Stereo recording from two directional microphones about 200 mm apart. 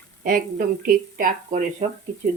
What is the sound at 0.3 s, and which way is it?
A woman's voice, 45° right (ahead or behind).